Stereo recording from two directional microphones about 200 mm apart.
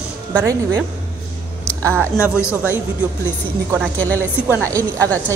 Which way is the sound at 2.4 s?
10° left (ahead or behind).